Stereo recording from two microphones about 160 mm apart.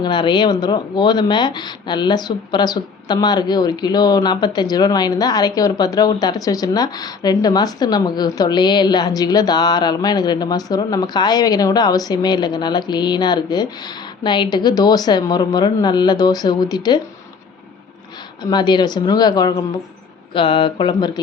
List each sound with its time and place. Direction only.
0.0 s speech: 30° left (ahead or behind)
18.4 s speech: 25° left (ahead or behind)